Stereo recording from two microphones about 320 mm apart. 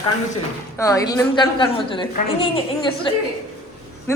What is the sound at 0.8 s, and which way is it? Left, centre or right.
A woman's voice, centre.